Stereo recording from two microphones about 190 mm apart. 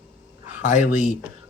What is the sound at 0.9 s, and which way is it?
Speech, 40° left (ahead or behind).